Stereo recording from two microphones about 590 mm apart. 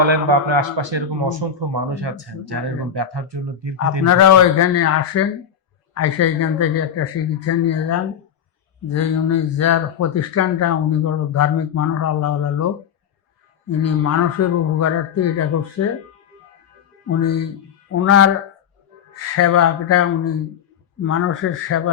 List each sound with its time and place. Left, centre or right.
0.0 s a man's voice: right
4.0 s speech: left
17.1 s speech: left
19.4 s speech: left